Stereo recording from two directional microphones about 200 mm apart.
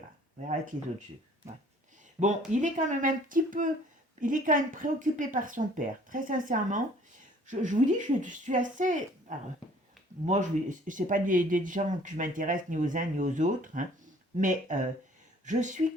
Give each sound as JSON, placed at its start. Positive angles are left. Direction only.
{"t": 0.4, "sound": "speech", "side_deg": -40}
{"t": 2.5, "sound": "speech", "side_deg": -40}